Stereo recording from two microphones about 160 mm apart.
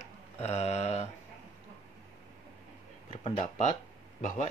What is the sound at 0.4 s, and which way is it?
Mantra, 45° left (ahead or behind).